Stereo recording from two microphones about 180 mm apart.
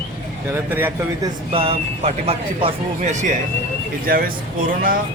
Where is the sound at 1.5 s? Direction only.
30° right (ahead or behind).